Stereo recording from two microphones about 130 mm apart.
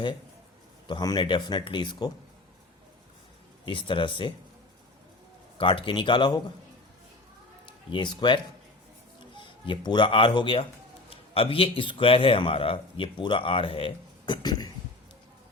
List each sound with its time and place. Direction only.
0.9 s speech: 35° left (ahead or behind)
3.7 s speech: 40° left (ahead or behind)
5.5 s speech: 40° left (ahead or behind)
7.9 s a man's voice: 40° left (ahead or behind)